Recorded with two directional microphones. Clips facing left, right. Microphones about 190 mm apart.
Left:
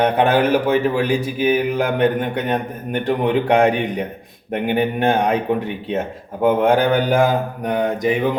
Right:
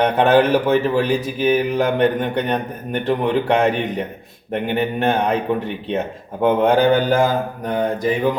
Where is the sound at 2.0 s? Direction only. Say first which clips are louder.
Even; 5° left (ahead or behind).